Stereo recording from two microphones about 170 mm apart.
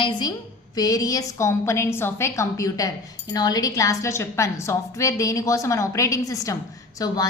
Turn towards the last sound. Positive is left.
turn(degrees=20)  # may be behind; listen again after turning